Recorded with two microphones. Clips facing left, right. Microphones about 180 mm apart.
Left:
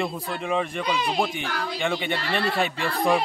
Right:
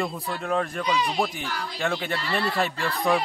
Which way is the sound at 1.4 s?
60° left (ahead or behind).